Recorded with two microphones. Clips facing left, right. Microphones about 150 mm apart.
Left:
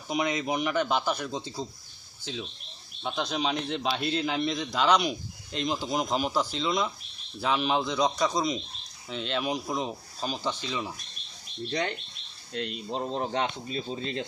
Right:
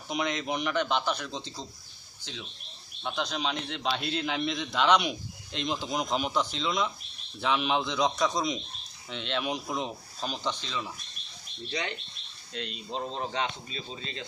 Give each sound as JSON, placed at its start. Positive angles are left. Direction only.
{"t": 0.1, "sound": "a man's voice", "side_deg": 5}
{"t": 3.0, "sound": "speech", "side_deg": 5}
{"t": 12.9, "sound": "a man's voice", "side_deg": 15}
{"t": 13.3, "sound": "speech", "side_deg": 55}